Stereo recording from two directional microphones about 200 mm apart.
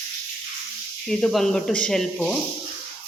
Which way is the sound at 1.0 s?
Centre (ahead or behind).